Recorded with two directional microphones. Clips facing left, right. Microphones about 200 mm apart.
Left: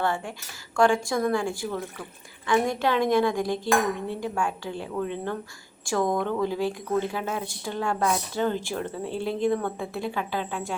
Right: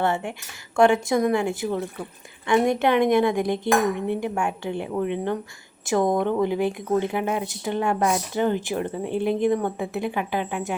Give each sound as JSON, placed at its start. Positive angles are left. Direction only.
{"t": 0.0, "sound": "speech", "side_deg": -25}